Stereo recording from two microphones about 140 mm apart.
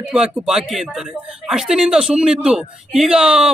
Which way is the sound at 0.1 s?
5° right (ahead or behind).